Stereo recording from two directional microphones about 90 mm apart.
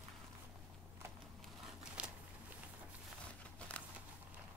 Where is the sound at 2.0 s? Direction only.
15° right (ahead or behind).